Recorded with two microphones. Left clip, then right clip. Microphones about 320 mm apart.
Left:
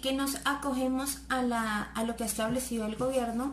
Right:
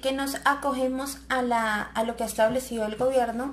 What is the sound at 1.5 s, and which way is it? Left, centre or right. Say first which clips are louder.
A woman's voice: right 6 dB; right.